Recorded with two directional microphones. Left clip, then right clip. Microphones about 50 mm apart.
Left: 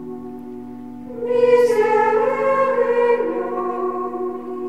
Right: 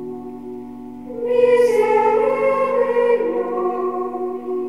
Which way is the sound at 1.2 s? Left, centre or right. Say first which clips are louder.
Even; centre.